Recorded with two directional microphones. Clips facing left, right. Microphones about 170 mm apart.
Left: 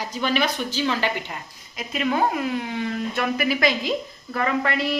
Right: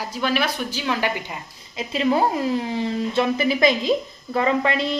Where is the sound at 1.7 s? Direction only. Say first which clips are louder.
Right 4 dB; 30° right (ahead or behind).